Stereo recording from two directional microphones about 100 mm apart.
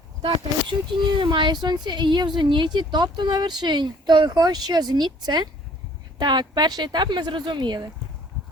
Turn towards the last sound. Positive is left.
turn(degrees=-50)  # may be behind; listen again after turning